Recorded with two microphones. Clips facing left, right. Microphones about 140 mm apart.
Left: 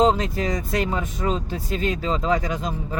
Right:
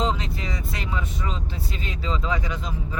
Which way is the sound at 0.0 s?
45° left (ahead or behind).